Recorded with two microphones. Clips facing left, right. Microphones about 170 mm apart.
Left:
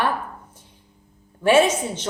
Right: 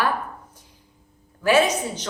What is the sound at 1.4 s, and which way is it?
Speech, 25° left (ahead or behind).